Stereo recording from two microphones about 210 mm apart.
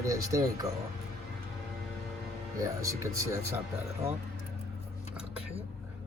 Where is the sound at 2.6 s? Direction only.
15° right (ahead or behind).